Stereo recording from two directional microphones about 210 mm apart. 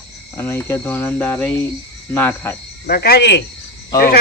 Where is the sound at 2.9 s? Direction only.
50° left (ahead or behind).